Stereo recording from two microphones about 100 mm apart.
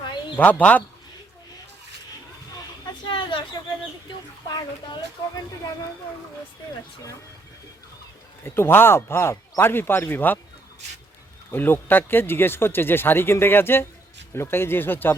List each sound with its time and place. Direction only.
0.3 s speech: 15° left (ahead or behind)
3.0 s a sound: 55° left (ahead or behind)
4.4 s speech: 40° left (ahead or behind)
8.4 s speech: 25° left (ahead or behind)
11.5 s speech: 20° left (ahead or behind)